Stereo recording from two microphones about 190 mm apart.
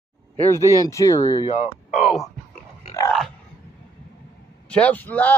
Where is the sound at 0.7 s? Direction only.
15° left (ahead or behind).